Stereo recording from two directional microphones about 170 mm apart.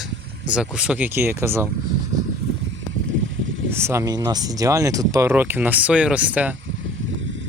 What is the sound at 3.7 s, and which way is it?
Speech, 15° right (ahead or behind).